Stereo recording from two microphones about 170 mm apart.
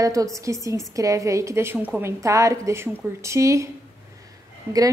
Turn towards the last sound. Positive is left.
turn(degrees=-15)  # may be behind; listen again after turning